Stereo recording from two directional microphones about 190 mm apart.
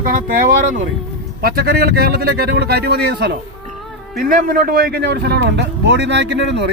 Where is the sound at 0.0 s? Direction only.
45° right (ahead or behind).